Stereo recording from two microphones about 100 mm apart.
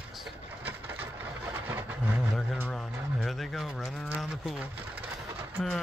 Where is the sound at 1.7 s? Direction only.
20° right (ahead or behind).